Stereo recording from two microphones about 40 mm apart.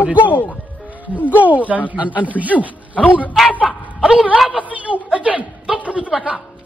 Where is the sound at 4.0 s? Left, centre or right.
Right.